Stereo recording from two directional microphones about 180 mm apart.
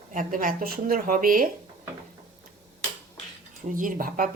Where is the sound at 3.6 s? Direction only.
45° right (ahead or behind).